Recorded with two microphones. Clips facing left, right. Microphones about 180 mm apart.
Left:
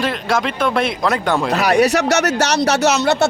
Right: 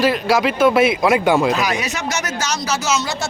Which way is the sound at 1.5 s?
65° left (ahead or behind).